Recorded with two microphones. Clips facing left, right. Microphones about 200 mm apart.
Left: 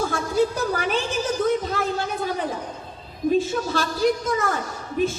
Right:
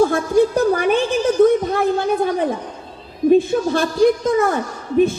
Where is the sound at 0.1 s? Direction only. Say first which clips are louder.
Right 7 dB; 55° right (ahead or behind).